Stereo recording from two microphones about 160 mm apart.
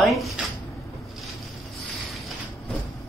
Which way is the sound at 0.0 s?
Centre (ahead or behind).